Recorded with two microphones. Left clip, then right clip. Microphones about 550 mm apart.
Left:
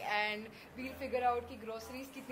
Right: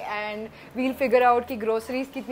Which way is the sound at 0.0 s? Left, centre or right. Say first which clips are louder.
Right 5 dB; right.